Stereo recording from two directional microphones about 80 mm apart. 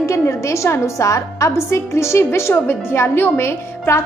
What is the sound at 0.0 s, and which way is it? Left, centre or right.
A woman's voice, left.